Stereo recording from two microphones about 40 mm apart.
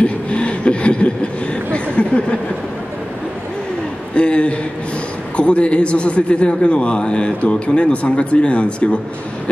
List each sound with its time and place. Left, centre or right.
0.0 s chuckle: left
4.1 s a man's voice: left